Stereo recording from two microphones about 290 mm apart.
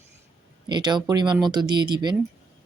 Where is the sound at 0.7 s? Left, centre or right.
Centre.